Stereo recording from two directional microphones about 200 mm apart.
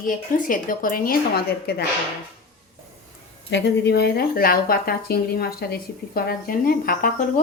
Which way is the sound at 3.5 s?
60° left (ahead or behind).